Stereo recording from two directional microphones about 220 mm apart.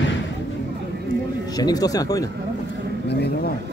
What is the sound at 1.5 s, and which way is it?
Speech, 15° left (ahead or behind).